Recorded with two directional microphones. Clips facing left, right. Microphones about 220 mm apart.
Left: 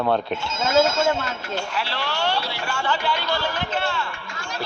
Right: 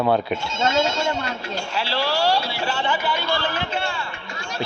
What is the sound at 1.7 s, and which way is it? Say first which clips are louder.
Speech: right 4 dB; 30° right (ahead or behind).